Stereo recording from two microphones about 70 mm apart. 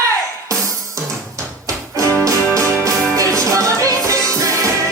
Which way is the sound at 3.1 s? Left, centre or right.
Right.